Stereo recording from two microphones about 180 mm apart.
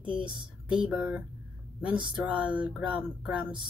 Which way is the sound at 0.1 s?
25° right (ahead or behind).